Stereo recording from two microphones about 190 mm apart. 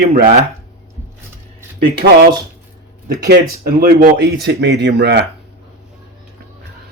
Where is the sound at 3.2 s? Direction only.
55° right (ahead or behind).